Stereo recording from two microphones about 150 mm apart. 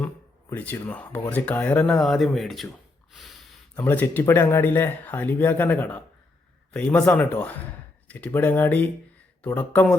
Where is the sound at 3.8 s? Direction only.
10° left (ahead or behind).